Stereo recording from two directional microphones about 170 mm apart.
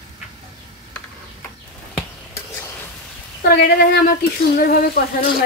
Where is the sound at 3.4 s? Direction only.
65° left (ahead or behind).